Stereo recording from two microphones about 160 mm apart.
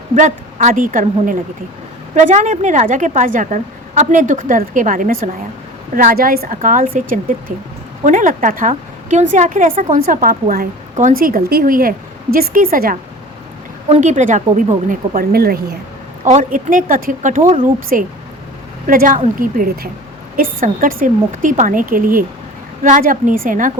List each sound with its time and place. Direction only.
0.2 s a woman's voice: 50° right (ahead or behind)
13.8 s a woman's voice: 45° right (ahead or behind)
15.2 s speech: 75° right (ahead or behind)
16.2 s a woman's voice: 50° right (ahead or behind)